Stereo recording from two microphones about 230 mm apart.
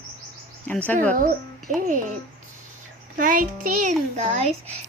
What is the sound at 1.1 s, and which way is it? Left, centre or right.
A child's voice, right.